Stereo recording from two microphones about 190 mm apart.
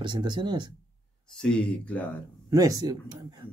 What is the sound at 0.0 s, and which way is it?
Speech, 25° right (ahead or behind).